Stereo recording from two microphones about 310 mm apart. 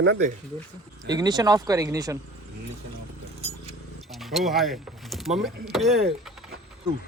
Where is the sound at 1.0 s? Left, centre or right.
Centre.